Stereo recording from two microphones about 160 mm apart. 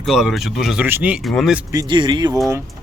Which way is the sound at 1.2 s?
Centre (ahead or behind).